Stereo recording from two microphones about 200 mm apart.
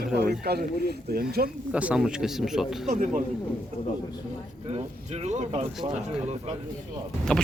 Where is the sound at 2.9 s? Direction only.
40° right (ahead or behind).